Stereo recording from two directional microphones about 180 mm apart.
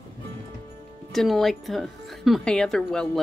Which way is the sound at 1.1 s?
Centre (ahead or behind).